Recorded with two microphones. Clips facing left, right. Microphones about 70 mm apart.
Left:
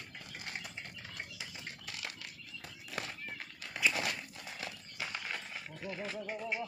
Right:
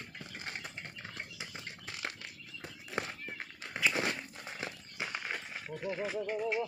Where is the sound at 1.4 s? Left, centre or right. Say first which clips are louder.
Right 2 dB; right.